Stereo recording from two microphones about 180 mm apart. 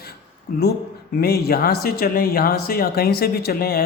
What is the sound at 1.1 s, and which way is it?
A woman's voice, 60° left (ahead or behind).